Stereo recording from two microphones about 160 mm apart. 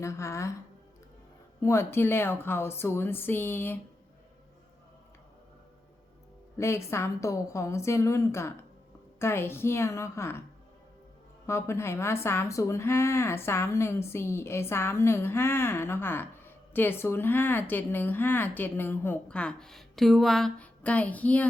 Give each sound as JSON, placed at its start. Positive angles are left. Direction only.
{"t": 0.0, "sound": "a woman's voice", "side_deg": 20}
{"t": 1.6, "sound": "a woman's voice", "side_deg": 15}
{"t": 6.6, "sound": "a woman's voice", "side_deg": 15}
{"t": 11.4, "sound": "a woman's voice", "side_deg": 15}